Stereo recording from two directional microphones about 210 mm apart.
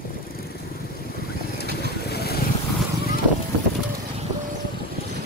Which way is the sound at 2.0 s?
50° left (ahead or behind).